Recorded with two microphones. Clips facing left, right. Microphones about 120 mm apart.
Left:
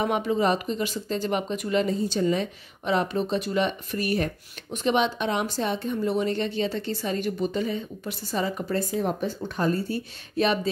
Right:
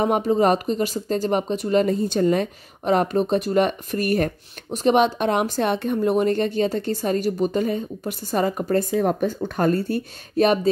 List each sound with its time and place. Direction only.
0.0 s speech: 40° right (ahead or behind)